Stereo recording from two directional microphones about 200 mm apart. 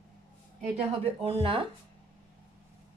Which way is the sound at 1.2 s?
25° right (ahead or behind).